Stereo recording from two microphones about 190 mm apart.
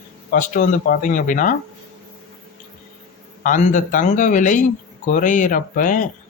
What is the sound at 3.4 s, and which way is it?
Speech, 45° left (ahead or behind).